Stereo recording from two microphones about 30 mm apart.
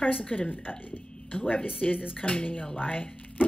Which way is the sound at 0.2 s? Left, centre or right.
Left.